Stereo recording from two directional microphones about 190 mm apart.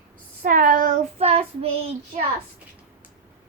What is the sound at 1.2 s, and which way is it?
Speech, 30° right (ahead or behind).